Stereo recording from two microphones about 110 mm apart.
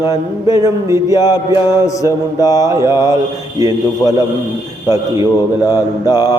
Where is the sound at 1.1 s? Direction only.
35° left (ahead or behind).